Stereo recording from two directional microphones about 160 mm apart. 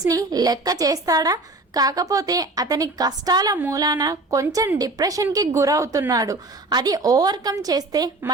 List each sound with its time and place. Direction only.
0.0 s a woman's voice: 20° right (ahead or behind)